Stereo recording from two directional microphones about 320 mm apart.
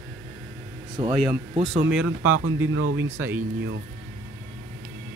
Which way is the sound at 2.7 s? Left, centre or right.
Right.